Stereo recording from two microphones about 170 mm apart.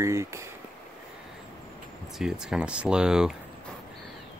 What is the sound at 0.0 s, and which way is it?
Speech, 15° right (ahead or behind).